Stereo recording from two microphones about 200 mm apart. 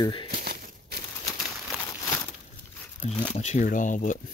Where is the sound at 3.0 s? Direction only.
30° left (ahead or behind).